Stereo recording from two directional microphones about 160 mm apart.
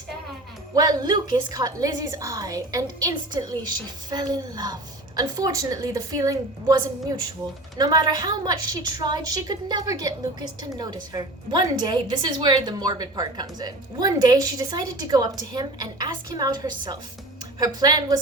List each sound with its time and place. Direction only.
0.8 s speech: 25° right (ahead or behind)